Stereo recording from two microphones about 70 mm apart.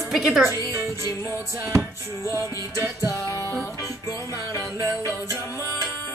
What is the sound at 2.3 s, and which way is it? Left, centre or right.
Music, right.